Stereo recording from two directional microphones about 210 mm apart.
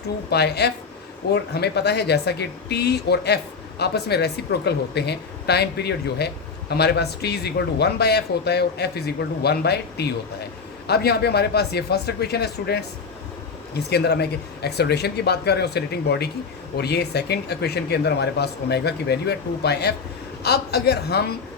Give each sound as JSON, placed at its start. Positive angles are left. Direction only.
{"t": 0.3, "sound": "speech", "side_deg": 50}